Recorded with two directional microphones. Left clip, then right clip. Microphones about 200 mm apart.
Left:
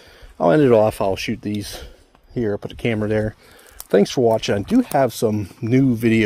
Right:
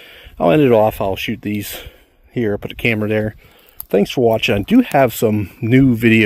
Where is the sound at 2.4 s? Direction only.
40° right (ahead or behind).